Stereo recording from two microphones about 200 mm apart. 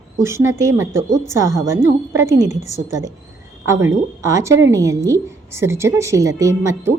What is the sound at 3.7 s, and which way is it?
A woman's voice, 15° right (ahead or behind).